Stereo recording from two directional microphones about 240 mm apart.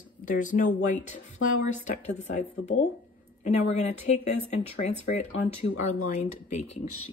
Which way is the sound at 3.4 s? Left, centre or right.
Left.